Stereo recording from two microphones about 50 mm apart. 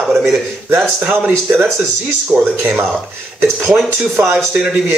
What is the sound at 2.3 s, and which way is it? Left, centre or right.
Speech, centre.